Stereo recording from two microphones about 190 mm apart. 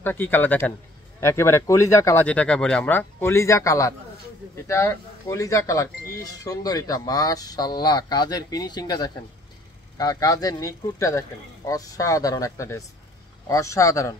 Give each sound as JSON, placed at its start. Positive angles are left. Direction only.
{"t": 0.0, "sound": "speech", "side_deg": 10}